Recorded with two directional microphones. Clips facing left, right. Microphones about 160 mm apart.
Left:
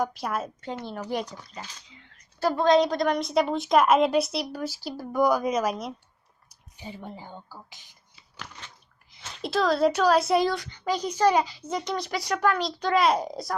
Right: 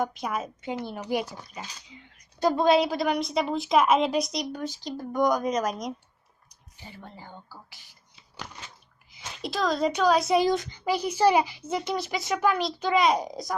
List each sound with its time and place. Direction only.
0.0 s speech: centre (ahead or behind)
6.7 s speech: 15° left (ahead or behind)
8.6 s a sound: centre (ahead or behind)
10.4 s a child's voice: 20° right (ahead or behind); by 13.6 s centre (ahead or behind)